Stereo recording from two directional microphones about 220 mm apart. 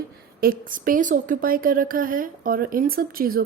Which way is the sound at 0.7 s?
40° right (ahead or behind).